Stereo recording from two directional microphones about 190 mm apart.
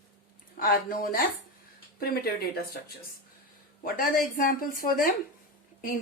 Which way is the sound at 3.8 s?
50° left (ahead or behind).